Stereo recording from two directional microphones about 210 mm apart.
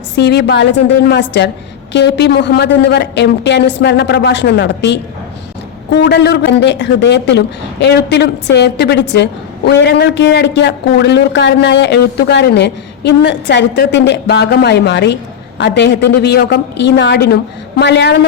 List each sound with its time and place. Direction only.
0.2 s a man's voice: 50° left (ahead or behind)